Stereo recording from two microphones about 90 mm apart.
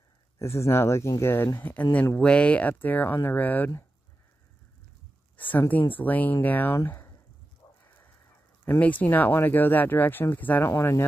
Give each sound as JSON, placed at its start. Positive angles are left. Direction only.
{"t": 0.4, "sound": "speech", "side_deg": 30}
{"t": 5.4, "sound": "speech", "side_deg": 20}
{"t": 7.6, "sound": "a sound", "side_deg": 45}
{"t": 8.6, "sound": "speech", "side_deg": 20}